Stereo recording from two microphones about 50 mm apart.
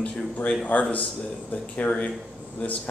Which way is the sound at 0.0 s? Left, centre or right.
Left.